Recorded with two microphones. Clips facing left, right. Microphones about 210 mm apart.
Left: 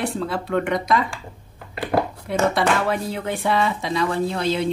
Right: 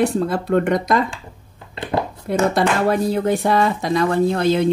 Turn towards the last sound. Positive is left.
turn(degrees=-50)  # may be behind; listen again after turning